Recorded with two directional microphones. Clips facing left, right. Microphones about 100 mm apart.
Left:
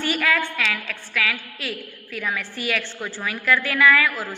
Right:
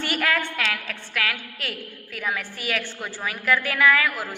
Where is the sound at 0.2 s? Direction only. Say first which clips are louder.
Left 2 dB; 30° right (ahead or behind).